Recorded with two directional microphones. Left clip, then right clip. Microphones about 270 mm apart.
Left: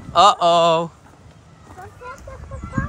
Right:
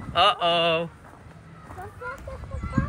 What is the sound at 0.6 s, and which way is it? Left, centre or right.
Speech, centre.